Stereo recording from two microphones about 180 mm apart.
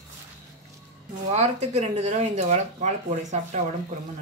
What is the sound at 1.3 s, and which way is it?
Speech, 35° right (ahead or behind).